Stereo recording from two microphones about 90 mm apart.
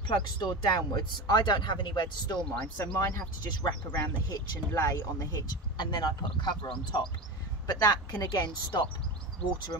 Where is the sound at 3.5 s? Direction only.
50° left (ahead or behind).